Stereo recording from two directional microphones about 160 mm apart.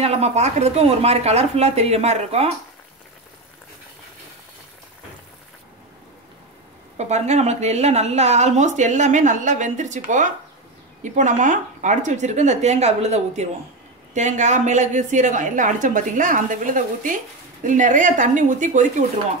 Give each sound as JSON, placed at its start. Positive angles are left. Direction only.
{"t": 0.0, "sound": "speech", "side_deg": -40}
{"t": 7.0, "sound": "a woman's voice", "side_deg": -45}